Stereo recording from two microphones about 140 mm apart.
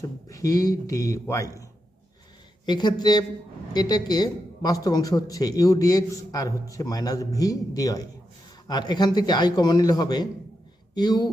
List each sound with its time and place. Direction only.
0.0 s a woman's voice: 25° left (ahead or behind)
2.6 s a woman's voice: 30° left (ahead or behind)